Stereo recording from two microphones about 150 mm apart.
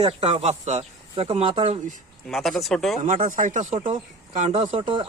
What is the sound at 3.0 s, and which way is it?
Speech, 55° right (ahead or behind).